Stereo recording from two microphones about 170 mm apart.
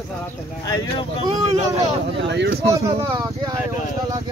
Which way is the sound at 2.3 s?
90° right.